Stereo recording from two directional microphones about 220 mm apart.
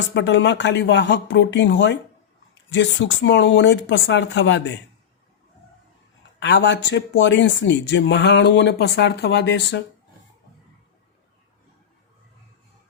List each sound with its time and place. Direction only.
0.1 s speech: 55° left (ahead or behind)
6.4 s speech: 55° left (ahead or behind)